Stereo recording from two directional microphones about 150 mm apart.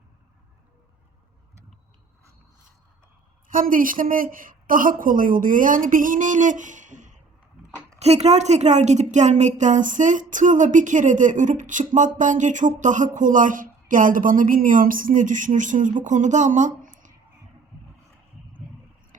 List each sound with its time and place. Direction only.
3.5 s a woman's voice: 65° right (ahead or behind)